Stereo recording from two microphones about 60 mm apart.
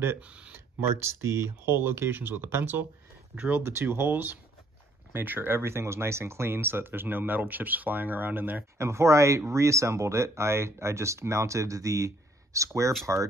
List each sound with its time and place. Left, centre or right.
0.5 s speech: right
8.7 s speech: right